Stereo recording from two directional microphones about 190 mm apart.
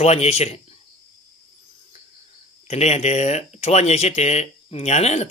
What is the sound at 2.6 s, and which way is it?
Speech, 35° left (ahead or behind).